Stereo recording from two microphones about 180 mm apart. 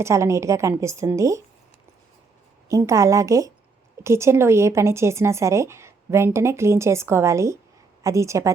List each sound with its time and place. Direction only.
0.0 s speech: 15° right (ahead or behind)
2.6 s speech: 15° right (ahead or behind)